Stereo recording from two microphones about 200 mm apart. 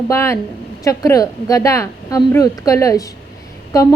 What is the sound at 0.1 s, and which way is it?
A woman's voice, 15° left (ahead or behind).